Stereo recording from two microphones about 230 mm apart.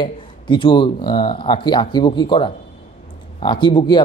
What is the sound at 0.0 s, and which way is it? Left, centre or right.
Speech, left.